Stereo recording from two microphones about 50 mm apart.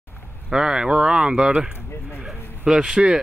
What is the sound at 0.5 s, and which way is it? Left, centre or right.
Speech, centre.